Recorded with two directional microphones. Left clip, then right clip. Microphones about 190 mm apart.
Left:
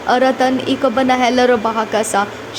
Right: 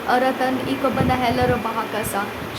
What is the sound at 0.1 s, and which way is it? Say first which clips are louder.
Speech: left 6 dB; 35° left (ahead or behind).